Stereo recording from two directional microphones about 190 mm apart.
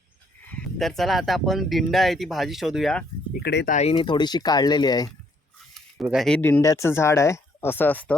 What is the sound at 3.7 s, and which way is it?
Speech, 35° left (ahead or behind).